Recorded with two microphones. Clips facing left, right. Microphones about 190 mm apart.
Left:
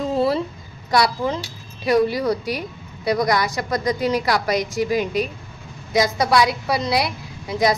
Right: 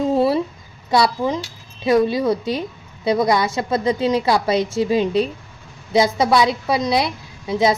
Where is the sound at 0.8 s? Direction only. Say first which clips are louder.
Right 2 dB; 25° right (ahead or behind).